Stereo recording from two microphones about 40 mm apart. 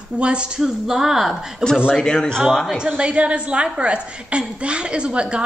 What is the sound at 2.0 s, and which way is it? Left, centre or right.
Speech, centre.